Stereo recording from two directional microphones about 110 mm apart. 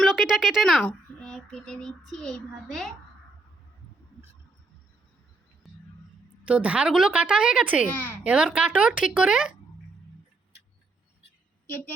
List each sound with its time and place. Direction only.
0.0 s a child's voice: 5° right (ahead or behind)
5.6 s a sound: centre (ahead or behind)
6.4 s a woman's voice: 10° right (ahead or behind)
7.9 s speech: 20° left (ahead or behind)
8.2 s a woman's voice: 10° right (ahead or behind)